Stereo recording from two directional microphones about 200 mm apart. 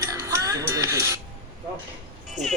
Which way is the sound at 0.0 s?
15° right (ahead or behind).